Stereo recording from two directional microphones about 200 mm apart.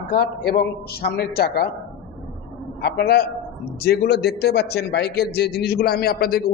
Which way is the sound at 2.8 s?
50° left (ahead or behind).